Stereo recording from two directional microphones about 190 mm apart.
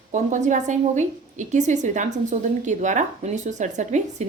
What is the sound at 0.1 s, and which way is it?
A woman's voice, 40° right (ahead or behind).